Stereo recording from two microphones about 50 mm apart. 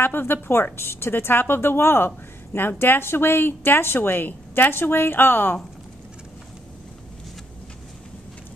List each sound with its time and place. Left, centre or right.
0.0 s a woman's voice: left